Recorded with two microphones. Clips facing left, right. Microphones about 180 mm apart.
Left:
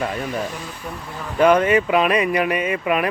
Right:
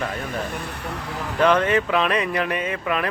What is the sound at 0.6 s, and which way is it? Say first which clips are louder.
Speech: right 1 dB; 65° right (ahead or behind).